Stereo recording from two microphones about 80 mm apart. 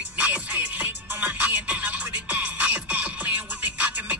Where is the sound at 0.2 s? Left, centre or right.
Centre.